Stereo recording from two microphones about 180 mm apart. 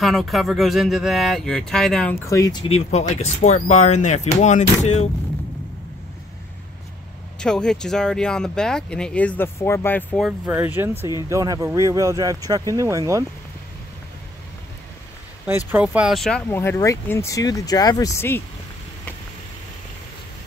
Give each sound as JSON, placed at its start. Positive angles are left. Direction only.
{"t": 0.0, "sound": "speech", "side_deg": 0}
{"t": 2.2, "sound": "speech", "side_deg": 20}
{"t": 2.7, "sound": "speech", "side_deg": 40}
{"t": 7.3, "sound": "speech", "side_deg": 5}
{"t": 10.2, "sound": "speech", "side_deg": -10}
{"t": 15.4, "sound": "speech", "side_deg": -10}
{"t": 16.4, "sound": "speech", "side_deg": 15}